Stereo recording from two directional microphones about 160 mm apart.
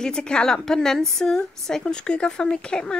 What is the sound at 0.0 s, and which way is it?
A woman's voice, 5° left (ahead or behind).